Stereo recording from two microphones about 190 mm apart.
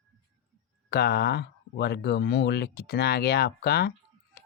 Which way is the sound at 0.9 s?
55° left (ahead or behind).